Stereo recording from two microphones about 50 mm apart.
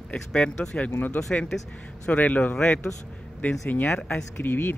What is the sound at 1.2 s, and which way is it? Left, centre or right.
Speech, left.